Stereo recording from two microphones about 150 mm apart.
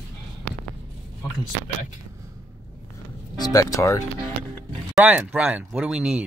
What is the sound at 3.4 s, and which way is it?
Speech, 25° left (ahead or behind).